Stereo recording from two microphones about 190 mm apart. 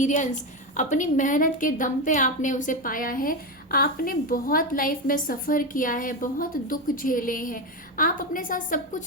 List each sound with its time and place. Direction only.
0.0 s a woman's voice: 40° left (ahead or behind)